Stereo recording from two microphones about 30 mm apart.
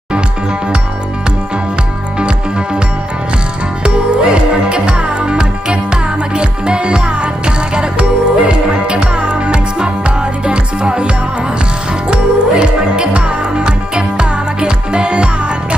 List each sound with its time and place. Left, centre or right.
2.1 s music: right
3.8 s music: right
12.1 s music: right